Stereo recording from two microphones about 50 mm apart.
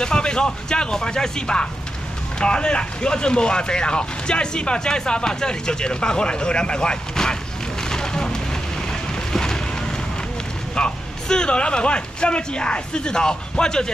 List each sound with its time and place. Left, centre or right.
0.0 s speech: centre
7.9 s fire: centre
9.3 s boat: centre
10.8 s speech: centre